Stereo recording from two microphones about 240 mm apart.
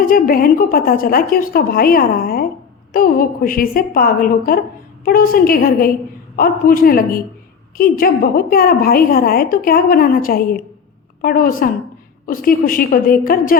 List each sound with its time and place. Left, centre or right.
0.0 s a woman's voice: left